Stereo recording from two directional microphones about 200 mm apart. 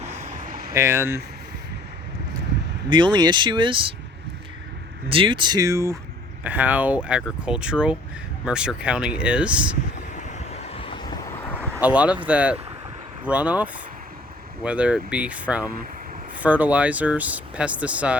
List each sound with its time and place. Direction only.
0.3 s vehicle: 40° right (ahead or behind)
0.7 s speech: 15° right (ahead or behind)
2.9 s speech: 20° right (ahead or behind)
5.0 s speech: 25° right (ahead or behind); by 9.6 s 5° right (ahead or behind)
10.2 s vehicle: 35° left (ahead or behind)
11.7 s speech: 5° right (ahead or behind)